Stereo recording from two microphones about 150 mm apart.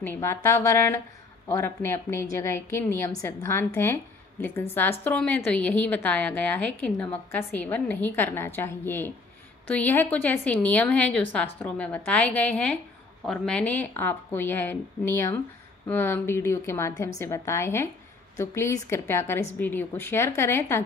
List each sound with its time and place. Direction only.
0.0 s a woman's voice: 15° left (ahead or behind)